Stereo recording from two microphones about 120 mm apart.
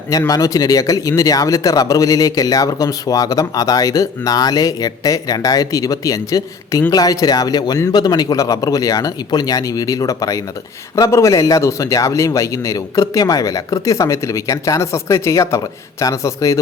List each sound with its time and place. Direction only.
0.1 s speech: 30° left (ahead or behind)